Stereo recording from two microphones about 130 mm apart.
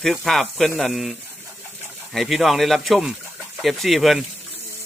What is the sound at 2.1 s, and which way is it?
Speech, centre (ahead or behind).